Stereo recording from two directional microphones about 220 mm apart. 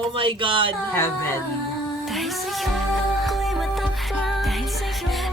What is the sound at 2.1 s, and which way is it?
Music, centre (ahead or behind).